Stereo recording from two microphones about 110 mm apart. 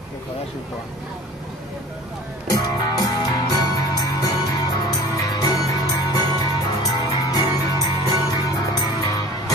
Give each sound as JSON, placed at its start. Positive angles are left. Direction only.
{"t": 2.6, "sound": "music", "side_deg": 35}